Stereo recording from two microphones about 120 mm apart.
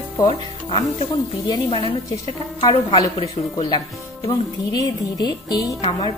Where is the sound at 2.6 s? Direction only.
50° left (ahead or behind).